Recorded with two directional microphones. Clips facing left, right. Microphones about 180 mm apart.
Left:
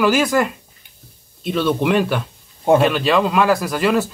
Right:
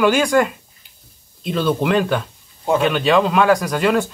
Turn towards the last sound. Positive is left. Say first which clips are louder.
# even
turn(degrees=0)  # may be behind; listen again after turning